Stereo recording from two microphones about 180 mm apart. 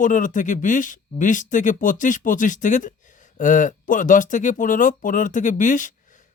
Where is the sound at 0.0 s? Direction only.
45° left (ahead or behind).